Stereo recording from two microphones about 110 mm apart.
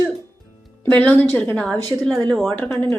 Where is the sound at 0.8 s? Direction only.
15° left (ahead or behind).